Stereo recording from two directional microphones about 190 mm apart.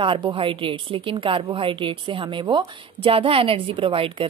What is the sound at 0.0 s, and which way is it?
A woman's voice, 25° right (ahead or behind).